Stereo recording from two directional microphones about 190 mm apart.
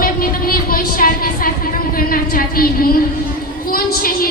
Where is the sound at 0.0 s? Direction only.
50° left (ahead or behind).